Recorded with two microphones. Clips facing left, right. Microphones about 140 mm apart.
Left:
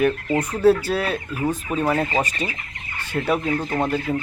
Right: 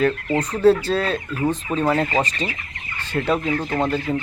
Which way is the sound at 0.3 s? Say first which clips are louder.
Right 1 dB; 10° left (ahead or behind).